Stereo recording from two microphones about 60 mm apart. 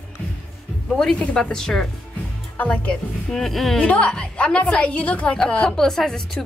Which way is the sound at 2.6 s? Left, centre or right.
Left.